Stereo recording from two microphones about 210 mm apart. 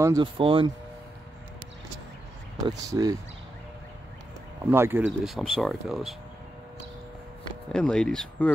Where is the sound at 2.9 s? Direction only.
15° right (ahead or behind).